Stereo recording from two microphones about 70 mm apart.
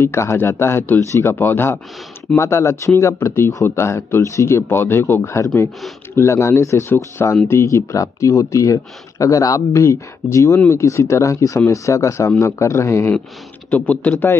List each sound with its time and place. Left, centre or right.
0.0 s speech: left
2.3 s speech: left
9.7 s speech: left
13.7 s speech: left